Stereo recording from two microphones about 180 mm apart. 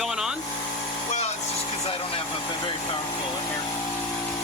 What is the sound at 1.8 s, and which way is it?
Vehicle, 30° left (ahead or behind).